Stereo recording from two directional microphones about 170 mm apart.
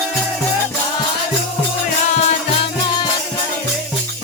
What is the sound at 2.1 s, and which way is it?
Music, 40° left (ahead or behind).